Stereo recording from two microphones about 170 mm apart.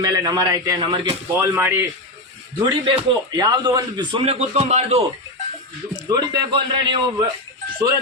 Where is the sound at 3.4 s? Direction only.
25° right (ahead or behind); by 5.0 s 40° right (ahead or behind).